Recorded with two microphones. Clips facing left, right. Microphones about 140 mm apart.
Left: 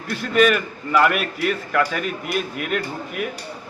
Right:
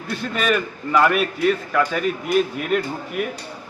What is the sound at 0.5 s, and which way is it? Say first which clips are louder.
A man's voice: right 1 dB; 5° left (ahead or behind).